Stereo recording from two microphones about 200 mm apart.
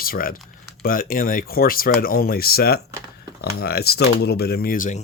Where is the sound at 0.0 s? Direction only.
45° left (ahead or behind).